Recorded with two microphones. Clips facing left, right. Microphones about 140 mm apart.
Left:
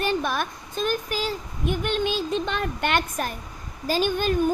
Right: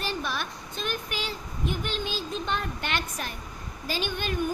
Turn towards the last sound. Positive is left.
turn(degrees=40)  # may be behind; listen again after turning